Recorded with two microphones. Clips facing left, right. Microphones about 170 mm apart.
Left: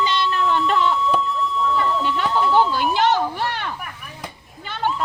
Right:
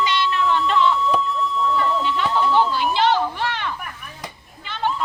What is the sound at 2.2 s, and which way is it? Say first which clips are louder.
Speech: even; centre (ahead or behind).